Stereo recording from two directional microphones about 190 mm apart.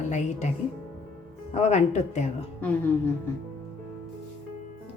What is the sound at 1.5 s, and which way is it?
Speech, 35° left (ahead or behind).